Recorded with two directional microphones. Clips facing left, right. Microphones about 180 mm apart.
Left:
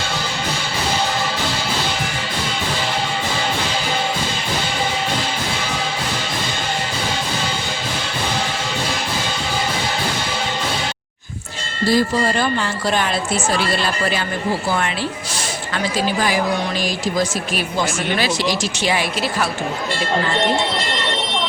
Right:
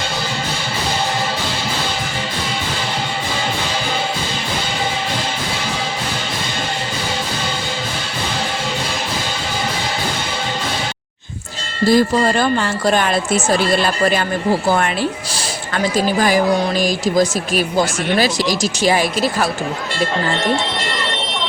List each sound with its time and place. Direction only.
11.9 s speech: 50° right (ahead or behind)
16.8 s speech: 40° right (ahead or behind)